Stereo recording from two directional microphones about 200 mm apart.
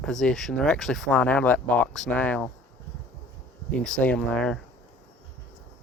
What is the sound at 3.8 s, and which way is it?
Speech, 5° left (ahead or behind).